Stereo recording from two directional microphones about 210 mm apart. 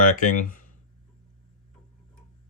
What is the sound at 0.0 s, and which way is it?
Speech, 40° left (ahead or behind).